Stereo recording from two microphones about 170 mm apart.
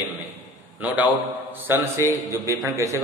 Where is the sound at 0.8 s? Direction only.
10° right (ahead or behind).